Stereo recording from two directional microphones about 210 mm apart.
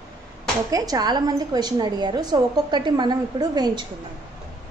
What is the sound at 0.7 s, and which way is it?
A woman's voice, 15° right (ahead or behind).